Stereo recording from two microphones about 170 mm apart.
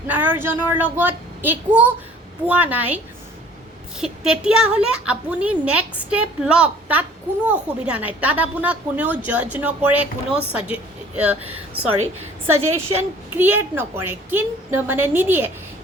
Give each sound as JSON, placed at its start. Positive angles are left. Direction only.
{"t": 0.1, "sound": "a woman's voice", "side_deg": -10}
{"t": 12.7, "sound": "a woman's voice", "side_deg": -15}